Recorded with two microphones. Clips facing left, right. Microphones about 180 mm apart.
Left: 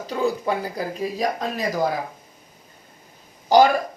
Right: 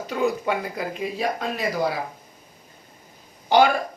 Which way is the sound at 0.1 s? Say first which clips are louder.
Left 1 dB; 35° left (ahead or behind).